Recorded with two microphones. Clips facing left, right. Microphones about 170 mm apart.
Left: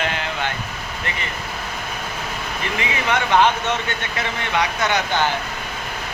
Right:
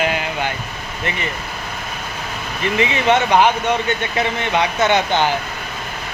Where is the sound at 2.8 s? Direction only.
20° right (ahead or behind).